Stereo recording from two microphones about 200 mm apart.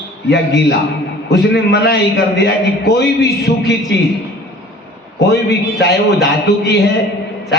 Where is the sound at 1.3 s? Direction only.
55° left (ahead or behind).